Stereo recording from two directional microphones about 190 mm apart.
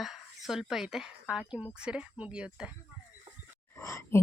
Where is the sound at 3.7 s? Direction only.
15° left (ahead or behind).